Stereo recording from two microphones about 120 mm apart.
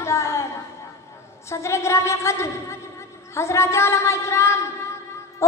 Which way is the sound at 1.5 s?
25° left (ahead or behind).